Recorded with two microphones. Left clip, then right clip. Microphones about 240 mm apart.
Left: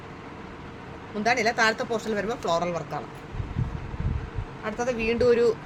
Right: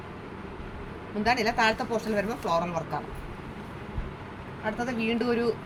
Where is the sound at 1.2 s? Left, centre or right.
Left.